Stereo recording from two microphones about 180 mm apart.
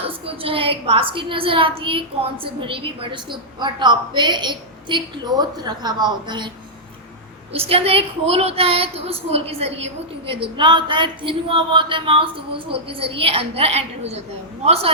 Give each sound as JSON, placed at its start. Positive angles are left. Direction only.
{"t": 0.0, "sound": "a woman's voice", "side_deg": -30}
{"t": 7.5, "sound": "a woman's voice", "side_deg": -30}